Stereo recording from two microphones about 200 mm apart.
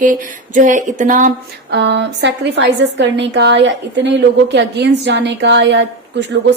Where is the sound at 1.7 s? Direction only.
60° right (ahead or behind).